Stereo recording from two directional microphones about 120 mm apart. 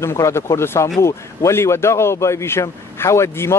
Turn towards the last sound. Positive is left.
turn(degrees=20)  # may be behind; listen again after turning